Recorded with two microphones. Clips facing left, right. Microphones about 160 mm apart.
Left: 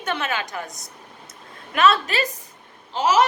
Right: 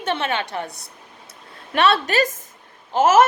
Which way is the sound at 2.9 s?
50° right (ahead or behind).